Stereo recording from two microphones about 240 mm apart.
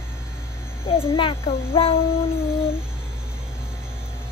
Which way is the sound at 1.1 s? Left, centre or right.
Left.